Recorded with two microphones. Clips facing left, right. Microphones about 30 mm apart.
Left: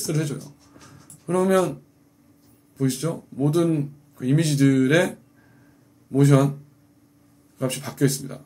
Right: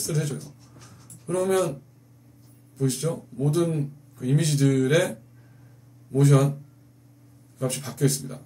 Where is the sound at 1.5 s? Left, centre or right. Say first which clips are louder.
Left 2 dB; centre.